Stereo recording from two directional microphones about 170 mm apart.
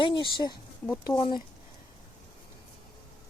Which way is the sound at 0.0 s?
30° left (ahead or behind).